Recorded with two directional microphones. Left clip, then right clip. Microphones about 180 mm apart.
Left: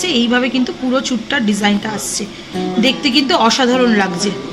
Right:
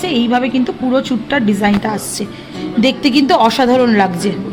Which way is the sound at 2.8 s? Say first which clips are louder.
Right 2 dB; 65° right (ahead or behind).